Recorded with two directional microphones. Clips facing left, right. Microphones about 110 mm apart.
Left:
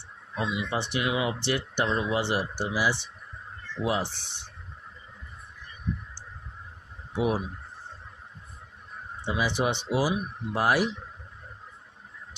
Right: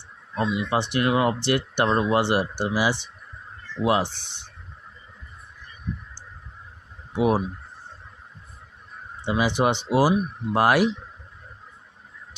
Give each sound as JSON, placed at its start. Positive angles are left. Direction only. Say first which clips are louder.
{"t": 0.4, "sound": "speech", "louder": "right 6 dB", "side_deg": -60}
{"t": 7.2, "sound": "speech", "louder": "right 5 dB", "side_deg": -60}
{"t": 9.2, "sound": "speech", "louder": "right 5 dB", "side_deg": -75}
{"t": 9.6, "sound": "speech", "louder": "right 7 dB", "side_deg": -60}
{"t": 10.6, "sound": "speech", "louder": "right 5 dB", "side_deg": -80}